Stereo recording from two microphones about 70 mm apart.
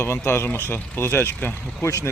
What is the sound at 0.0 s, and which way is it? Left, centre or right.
Speech, left.